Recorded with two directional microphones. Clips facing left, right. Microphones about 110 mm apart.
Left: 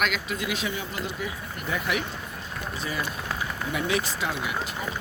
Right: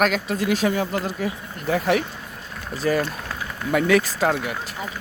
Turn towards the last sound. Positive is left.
turn(degrees=-50)  # may be behind; listen again after turning